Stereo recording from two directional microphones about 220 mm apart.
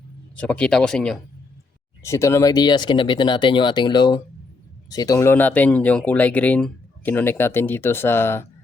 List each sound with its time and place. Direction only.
0.3 s speech: 5° left (ahead or behind)